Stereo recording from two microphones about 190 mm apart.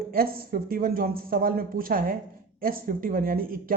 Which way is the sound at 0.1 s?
50° right (ahead or behind).